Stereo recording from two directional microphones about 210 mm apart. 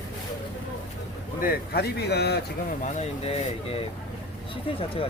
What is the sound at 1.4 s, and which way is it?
A man's voice, 50° left (ahead or behind).